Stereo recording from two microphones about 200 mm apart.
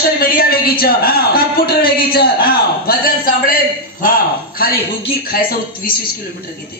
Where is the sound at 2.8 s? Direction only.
50° left (ahead or behind).